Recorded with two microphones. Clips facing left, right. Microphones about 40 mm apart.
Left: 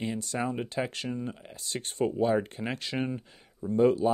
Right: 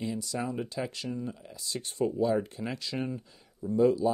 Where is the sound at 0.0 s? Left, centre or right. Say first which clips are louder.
Left 2 dB; left.